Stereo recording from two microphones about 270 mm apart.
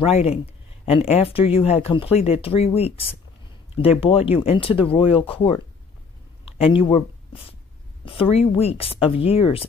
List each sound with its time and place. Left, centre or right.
0.0 s speech: left